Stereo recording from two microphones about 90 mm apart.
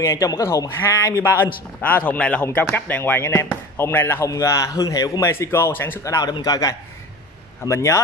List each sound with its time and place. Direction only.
0.0 s speech: 40° left (ahead or behind)
1.0 s speech: 40° left (ahead or behind)
1.3 s a man's voice: 20° left (ahead or behind); by 5.3 s 40° left (ahead or behind)
5.3 s a man's voice: 25° left (ahead or behind)
6.0 s a man's voice: 35° left (ahead or behind)